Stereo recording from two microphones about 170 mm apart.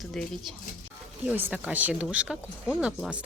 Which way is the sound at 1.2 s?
10° right (ahead or behind).